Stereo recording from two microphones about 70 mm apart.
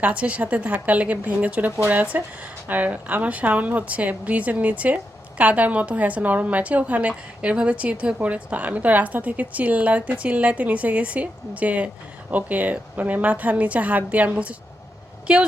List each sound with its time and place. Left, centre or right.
0.0 s a woman's voice: centre